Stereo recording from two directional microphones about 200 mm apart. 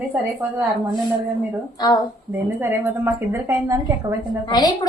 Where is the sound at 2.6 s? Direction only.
10° right (ahead or behind).